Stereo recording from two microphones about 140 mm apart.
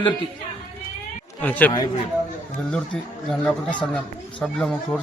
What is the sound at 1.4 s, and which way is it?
Speech, 10° left (ahead or behind).